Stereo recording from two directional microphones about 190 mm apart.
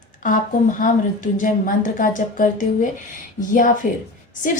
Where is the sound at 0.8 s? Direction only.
45° left (ahead or behind).